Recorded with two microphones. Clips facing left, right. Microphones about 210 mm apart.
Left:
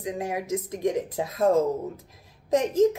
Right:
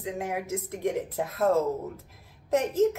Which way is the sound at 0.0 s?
15° left (ahead or behind).